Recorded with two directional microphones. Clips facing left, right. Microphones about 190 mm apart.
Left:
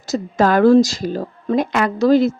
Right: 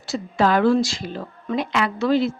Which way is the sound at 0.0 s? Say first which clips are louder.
Left 4 dB; 40° left (ahead or behind).